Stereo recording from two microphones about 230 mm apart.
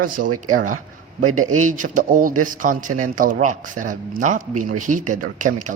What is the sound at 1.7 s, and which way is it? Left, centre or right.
Speech, right.